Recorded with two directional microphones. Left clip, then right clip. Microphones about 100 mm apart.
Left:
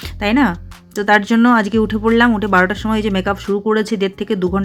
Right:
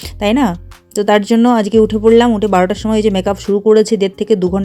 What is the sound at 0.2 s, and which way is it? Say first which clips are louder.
Speech: right 2 dB; 35° right (ahead or behind).